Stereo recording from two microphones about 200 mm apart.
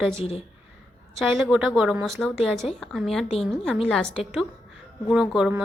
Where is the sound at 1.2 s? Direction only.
Centre (ahead or behind).